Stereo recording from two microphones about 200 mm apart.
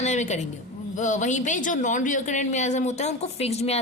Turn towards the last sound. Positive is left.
turn(degrees=30)  # may be behind; listen again after turning